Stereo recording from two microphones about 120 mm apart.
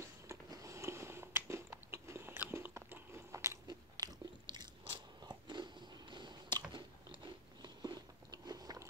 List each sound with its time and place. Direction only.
0.3 s biting: 25° right (ahead or behind)